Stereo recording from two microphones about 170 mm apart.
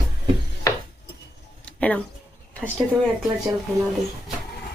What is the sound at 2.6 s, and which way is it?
Speech, 10° right (ahead or behind).